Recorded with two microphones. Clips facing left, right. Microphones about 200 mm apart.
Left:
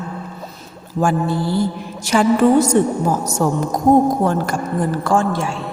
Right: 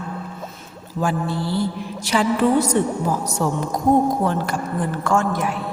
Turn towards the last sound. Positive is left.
turn(degrees=30)  # may be behind; listen again after turning